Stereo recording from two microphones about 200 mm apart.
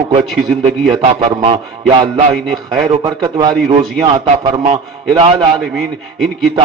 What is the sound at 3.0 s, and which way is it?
Speech, 20° right (ahead or behind).